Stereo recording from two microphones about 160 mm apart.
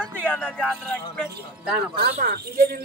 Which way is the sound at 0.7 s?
Centre (ahead or behind).